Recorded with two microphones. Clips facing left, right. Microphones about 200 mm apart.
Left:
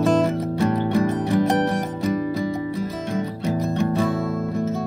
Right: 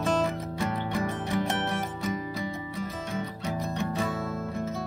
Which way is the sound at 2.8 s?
40° left (ahead or behind).